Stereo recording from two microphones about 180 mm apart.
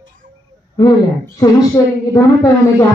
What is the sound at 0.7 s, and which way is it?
A woman's voice, 20° left (ahead or behind).